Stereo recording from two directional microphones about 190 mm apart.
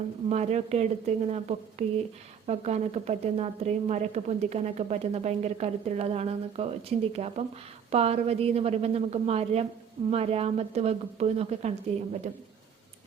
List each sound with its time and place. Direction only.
0.3 s a woman's voice: 35° right (ahead or behind)